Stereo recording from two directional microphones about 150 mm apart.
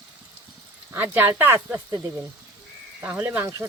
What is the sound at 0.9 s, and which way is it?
Speech, 10° right (ahead or behind).